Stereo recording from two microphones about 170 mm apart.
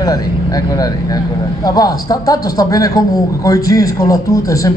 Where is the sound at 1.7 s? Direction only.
20° left (ahead or behind).